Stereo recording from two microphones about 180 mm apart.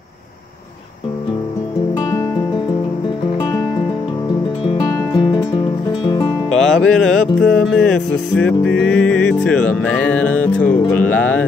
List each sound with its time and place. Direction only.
6.0 s music: 25° left (ahead or behind)
6.5 s music: 5° left (ahead or behind)
10.9 s a sound: 10° left (ahead or behind)